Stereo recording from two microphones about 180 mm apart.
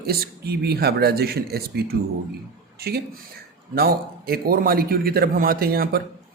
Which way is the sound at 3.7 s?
55° right (ahead or behind).